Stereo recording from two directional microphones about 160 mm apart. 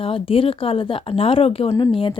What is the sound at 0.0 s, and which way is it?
Speech, 35° left (ahead or behind).